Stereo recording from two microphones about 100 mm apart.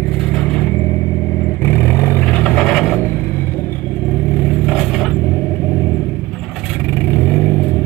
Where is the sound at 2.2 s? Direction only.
10° left (ahead or behind).